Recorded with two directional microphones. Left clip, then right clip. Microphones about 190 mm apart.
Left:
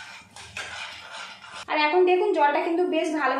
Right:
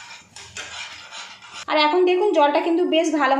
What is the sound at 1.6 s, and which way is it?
A woman's voice, 40° right (ahead or behind).